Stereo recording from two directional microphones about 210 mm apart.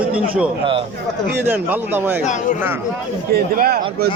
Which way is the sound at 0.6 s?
25° right (ahead or behind).